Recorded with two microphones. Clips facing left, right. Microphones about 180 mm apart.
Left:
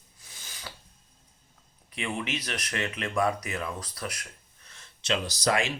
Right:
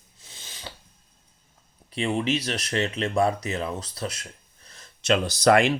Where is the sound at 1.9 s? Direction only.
30° right (ahead or behind).